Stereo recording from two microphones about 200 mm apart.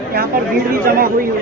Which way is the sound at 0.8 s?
45° right (ahead or behind).